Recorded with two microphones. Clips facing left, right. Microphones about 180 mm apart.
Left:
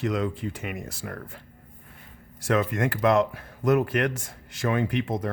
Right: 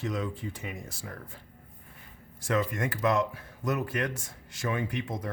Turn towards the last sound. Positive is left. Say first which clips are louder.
# left 7 dB
turn(degrees=75)  # may be behind; listen again after turning